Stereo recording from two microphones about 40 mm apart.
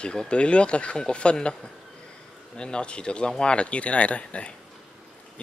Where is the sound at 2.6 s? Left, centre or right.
Left.